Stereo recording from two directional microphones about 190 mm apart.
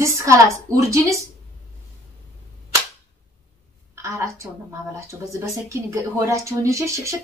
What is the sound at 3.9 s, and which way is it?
A woman's voice, 15° right (ahead or behind).